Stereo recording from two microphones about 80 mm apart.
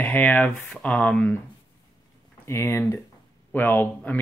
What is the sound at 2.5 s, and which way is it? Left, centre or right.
Speech, left.